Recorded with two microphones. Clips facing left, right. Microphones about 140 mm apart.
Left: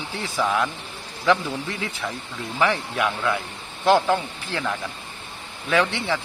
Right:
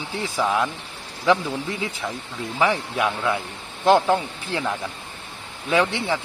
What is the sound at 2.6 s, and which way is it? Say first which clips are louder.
Speech: right 1 dB; 20° right (ahead or behind).